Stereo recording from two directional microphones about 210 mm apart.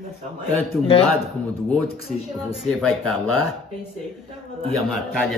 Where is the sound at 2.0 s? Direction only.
Centre (ahead or behind).